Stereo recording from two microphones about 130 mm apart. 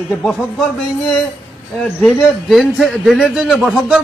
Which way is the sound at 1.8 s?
5° left (ahead or behind).